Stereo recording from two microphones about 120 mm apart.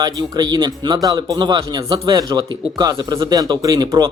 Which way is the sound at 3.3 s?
30° right (ahead or behind).